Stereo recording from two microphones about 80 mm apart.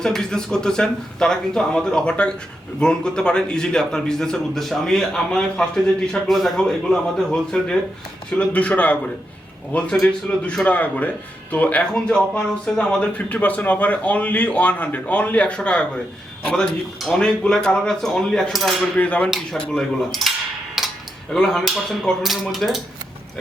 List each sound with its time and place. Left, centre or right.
0.0 s speech: centre
18.9 s speech: centre
20.8 s a sound: centre
21.3 s speech: centre